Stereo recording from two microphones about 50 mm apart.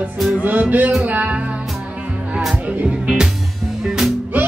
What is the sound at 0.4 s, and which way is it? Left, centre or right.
Music, right.